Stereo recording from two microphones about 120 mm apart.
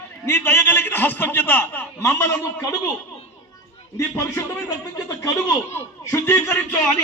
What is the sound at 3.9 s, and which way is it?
A man's voice, 25° left (ahead or behind).